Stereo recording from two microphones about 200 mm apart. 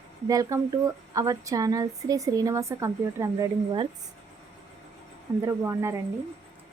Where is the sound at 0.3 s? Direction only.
15° right (ahead or behind).